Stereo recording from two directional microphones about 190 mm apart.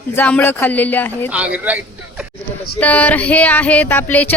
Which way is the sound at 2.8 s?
10° left (ahead or behind).